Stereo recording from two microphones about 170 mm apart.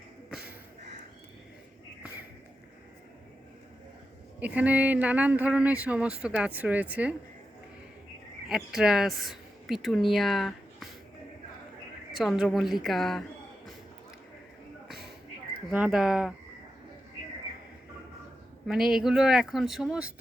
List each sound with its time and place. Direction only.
4.4 s speech: 10° right (ahead or behind)
8.4 s speech: centre (ahead or behind)
12.1 s speech: centre (ahead or behind)
15.7 s speech: 5° right (ahead or behind)
18.7 s speech: 5° right (ahead or behind)